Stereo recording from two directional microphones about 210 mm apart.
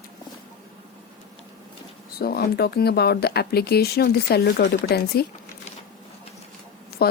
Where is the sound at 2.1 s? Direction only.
50° left (ahead or behind).